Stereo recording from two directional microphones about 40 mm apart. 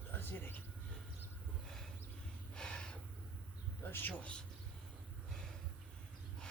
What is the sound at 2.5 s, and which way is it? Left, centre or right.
Snort, left.